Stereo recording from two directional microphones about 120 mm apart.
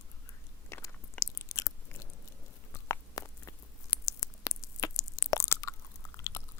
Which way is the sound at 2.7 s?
25° left (ahead or behind).